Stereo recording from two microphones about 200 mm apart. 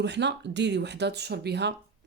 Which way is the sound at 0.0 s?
60° right (ahead or behind).